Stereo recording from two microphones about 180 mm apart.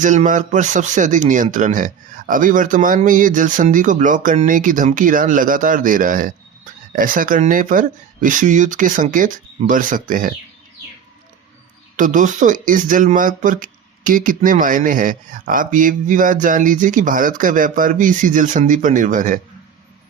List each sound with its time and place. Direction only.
0.0 s speech: 45° right (ahead or behind)
11.9 s speech: 45° right (ahead or behind)